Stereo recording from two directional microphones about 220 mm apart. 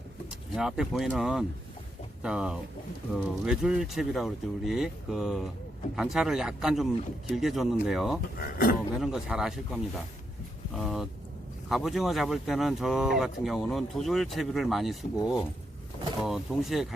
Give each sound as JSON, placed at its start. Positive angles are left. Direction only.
{"t": 0.3, "sound": "speech", "side_deg": 0}
{"t": 8.4, "sound": "speech", "side_deg": 40}
{"t": 9.0, "sound": "speech", "side_deg": 0}
{"t": 16.2, "sound": "speech", "side_deg": 0}